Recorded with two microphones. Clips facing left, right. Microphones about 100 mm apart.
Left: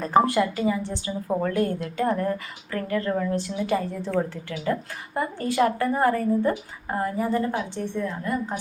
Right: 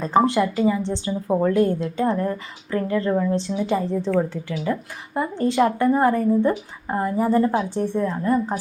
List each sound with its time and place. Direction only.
0.0 s a woman's voice: 20° right (ahead or behind)
7.3 s a woman's voice: 35° right (ahead or behind)